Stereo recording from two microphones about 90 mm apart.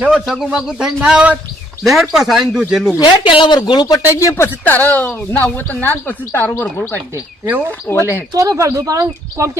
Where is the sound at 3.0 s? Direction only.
65° left (ahead or behind).